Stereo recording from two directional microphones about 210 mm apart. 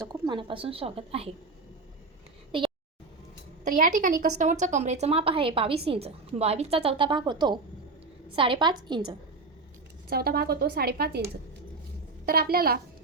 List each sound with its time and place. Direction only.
0.1 s a woman's voice: 20° right (ahead or behind)
3.6 s a woman's voice: 40° right (ahead or behind); by 9.1 s 20° right (ahead or behind)
10.1 s speech: 45° right (ahead or behind)
12.2 s speech: 45° right (ahead or behind)